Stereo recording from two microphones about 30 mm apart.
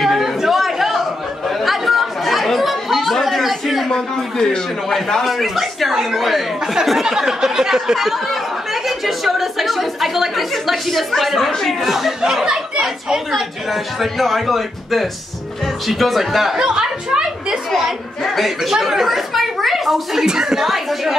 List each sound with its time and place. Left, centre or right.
0.0 s chatter: centre
3.9 s a man's voice: left
5.2 s a woman's voice: centre
6.6 s a sound: centre
8.0 s a woman's voice: centre
11.8 s a sound: centre
13.1 s a woman's voice: centre
16.5 s a woman's voice: right
18.2 s a woman's voice: centre
20.2 s a woman's voice: centre
20.6 s a sound: centre